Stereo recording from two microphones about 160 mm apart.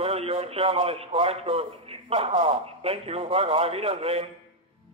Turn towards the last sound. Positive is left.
turn(degrees=-40)  # may be behind; listen again after turning